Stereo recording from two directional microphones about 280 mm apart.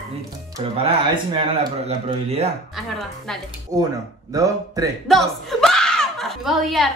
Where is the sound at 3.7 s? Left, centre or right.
Centre.